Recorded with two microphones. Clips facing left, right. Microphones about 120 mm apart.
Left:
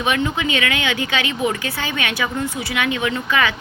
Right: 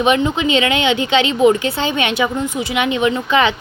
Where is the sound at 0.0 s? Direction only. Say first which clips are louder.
Right 5 dB; 20° right (ahead or behind).